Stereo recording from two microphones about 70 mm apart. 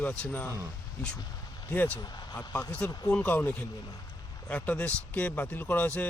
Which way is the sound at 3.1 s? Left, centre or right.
Left.